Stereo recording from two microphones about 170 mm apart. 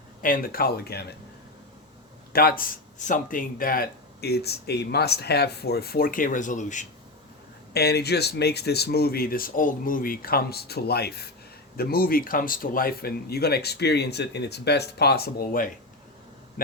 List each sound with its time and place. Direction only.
0.2 s speech: 55° left (ahead or behind)
2.3 s speech: 65° left (ahead or behind); by 6.8 s 45° left (ahead or behind)
7.7 s speech: 70° left (ahead or behind)